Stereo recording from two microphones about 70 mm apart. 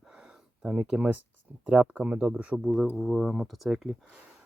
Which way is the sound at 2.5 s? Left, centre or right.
Centre.